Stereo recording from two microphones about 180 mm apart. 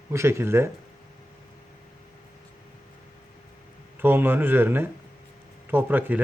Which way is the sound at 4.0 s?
10° right (ahead or behind).